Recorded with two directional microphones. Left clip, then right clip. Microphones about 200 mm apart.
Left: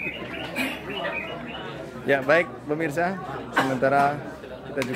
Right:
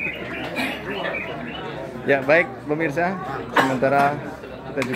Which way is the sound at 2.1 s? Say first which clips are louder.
Right 3 dB; 10° left (ahead or behind).